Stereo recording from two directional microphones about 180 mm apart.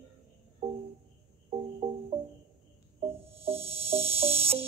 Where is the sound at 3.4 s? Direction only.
35° right (ahead or behind).